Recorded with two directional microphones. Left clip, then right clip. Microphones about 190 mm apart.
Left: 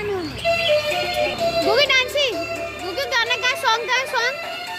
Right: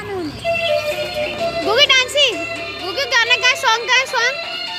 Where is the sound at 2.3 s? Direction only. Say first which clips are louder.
Right 2 dB; 40° left (ahead or behind).